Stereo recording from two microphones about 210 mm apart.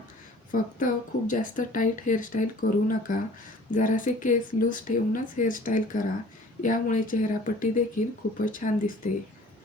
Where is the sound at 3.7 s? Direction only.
40° left (ahead or behind).